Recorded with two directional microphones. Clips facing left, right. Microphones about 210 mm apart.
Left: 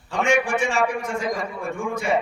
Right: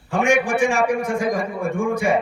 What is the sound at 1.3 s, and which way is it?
Speech, 50° right (ahead or behind).